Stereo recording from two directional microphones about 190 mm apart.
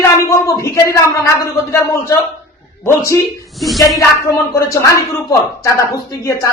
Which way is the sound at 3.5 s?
Centre (ahead or behind).